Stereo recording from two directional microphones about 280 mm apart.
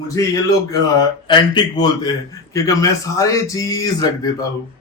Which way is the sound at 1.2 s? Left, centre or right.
Centre.